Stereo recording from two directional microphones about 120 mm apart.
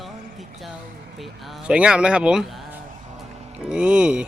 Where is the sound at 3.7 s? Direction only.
10° right (ahead or behind).